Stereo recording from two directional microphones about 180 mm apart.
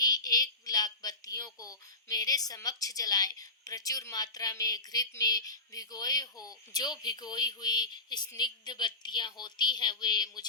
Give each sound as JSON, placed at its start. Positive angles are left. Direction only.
{"t": 0.0, "sound": "speech", "side_deg": 20}